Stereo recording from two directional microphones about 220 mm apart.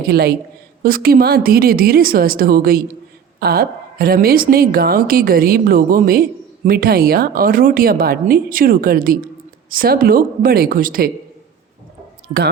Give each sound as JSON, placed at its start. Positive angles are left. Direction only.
{"t": 0.1, "sound": "a woman's voice", "side_deg": -45}
{"t": 12.3, "sound": "speech", "side_deg": -20}